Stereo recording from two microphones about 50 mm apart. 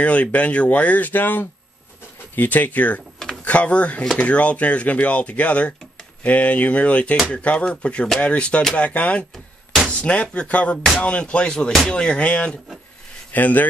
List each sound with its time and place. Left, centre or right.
0.0 s music: left
2.3 s speech: left
3.4 s music: left
13.3 s speech: left